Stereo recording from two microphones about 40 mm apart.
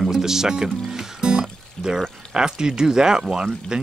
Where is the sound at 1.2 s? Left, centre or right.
Right.